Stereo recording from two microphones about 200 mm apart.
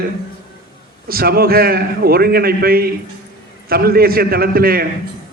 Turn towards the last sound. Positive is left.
turn(degrees=-50)  # may be behind; listen again after turning